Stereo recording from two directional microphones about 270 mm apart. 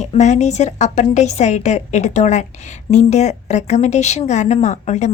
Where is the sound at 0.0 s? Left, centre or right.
Left.